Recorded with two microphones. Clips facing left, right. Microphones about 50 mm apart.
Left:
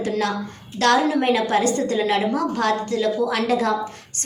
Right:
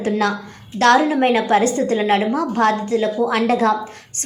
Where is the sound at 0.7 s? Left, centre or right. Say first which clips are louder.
Right 4 dB; right.